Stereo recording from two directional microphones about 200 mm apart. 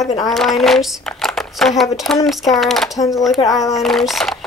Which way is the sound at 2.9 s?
15° left (ahead or behind).